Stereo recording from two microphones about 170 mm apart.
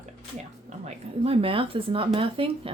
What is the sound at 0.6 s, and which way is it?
Speech, 40° right (ahead or behind).